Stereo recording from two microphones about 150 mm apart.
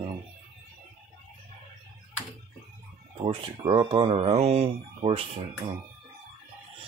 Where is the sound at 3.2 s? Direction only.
30° right (ahead or behind).